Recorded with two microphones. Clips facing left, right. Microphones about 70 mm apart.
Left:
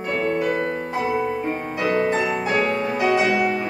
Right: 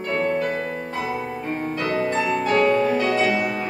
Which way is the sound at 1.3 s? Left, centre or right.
Centre.